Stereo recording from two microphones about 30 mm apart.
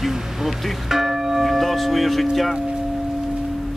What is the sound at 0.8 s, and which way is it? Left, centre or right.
Church bell, centre.